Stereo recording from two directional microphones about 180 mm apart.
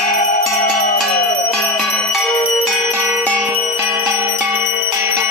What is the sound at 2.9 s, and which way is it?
Bell, 10° right (ahead or behind).